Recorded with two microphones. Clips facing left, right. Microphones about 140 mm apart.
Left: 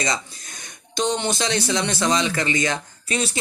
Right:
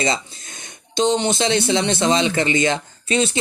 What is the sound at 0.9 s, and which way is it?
Speech, 20° right (ahead or behind).